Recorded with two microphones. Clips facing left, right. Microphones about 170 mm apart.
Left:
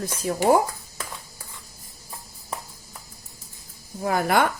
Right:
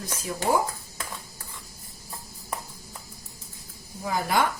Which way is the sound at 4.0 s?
60° left (ahead or behind).